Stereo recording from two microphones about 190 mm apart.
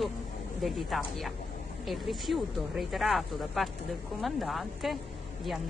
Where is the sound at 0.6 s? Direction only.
Centre (ahead or behind).